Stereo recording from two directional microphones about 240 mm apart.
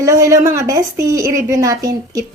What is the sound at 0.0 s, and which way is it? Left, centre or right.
A woman's voice, centre.